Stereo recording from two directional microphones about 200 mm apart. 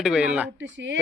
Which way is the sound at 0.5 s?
70° right (ahead or behind).